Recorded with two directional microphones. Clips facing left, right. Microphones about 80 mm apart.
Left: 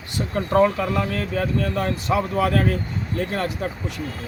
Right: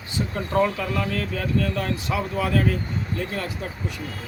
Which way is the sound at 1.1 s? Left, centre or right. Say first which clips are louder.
Left 2 dB; left.